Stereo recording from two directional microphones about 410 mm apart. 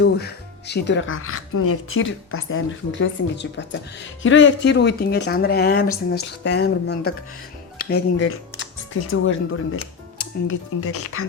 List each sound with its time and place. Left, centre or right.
0.0 s speech: left